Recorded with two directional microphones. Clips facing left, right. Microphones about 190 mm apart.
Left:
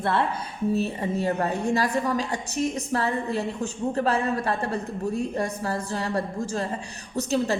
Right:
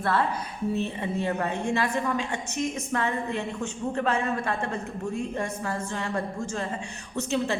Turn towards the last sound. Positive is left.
turn(degrees=40)  # may be behind; listen again after turning